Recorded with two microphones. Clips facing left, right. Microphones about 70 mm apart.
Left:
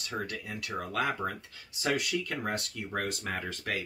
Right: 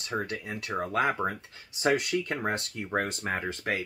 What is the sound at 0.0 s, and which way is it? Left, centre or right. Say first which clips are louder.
Speech: right 4 dB; right.